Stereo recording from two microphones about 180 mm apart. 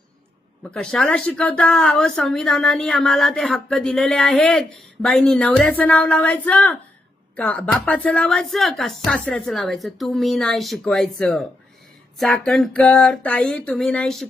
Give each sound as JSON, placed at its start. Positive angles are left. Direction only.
{"t": 0.6, "sound": "a woman's voice", "side_deg": 5}